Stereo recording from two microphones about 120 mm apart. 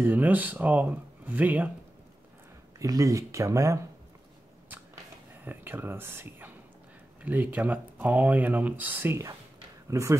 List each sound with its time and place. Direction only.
0.0 s speech: 15° right (ahead or behind)
2.8 s speech: 30° right (ahead or behind)
5.4 s speech: 15° right (ahead or behind)